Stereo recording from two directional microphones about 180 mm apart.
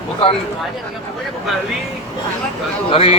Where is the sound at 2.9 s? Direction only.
30° left (ahead or behind).